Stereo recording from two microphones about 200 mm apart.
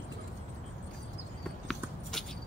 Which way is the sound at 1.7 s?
Centre (ahead or behind).